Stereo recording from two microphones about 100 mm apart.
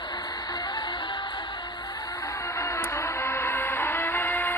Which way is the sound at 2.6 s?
25° left (ahead or behind).